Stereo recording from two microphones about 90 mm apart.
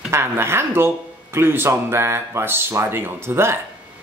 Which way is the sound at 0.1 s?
30° right (ahead or behind).